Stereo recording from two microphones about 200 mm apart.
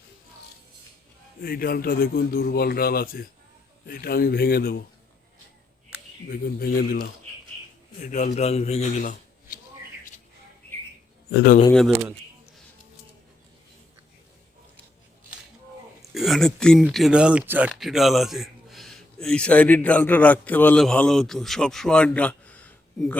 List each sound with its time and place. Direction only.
1.4 s speech: 45° left (ahead or behind)
6.2 s speech: 50° left (ahead or behind)
8.0 s a man's voice: 35° left (ahead or behind)
11.3 s a man's voice: 55° left (ahead or behind)
16.1 s speech: centre (ahead or behind)